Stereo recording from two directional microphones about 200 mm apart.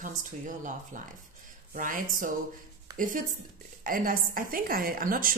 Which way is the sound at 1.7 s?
40° right (ahead or behind).